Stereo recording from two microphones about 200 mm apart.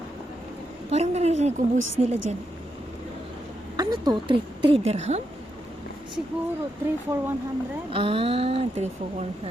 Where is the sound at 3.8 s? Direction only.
20° right (ahead or behind).